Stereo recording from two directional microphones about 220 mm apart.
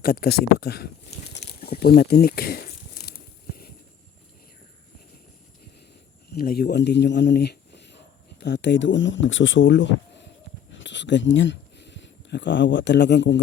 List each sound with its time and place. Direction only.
0.0 s speech: 40° left (ahead or behind)
1.3 s a sound: 45° left (ahead or behind)
6.3 s a man's voice: 45° left (ahead or behind)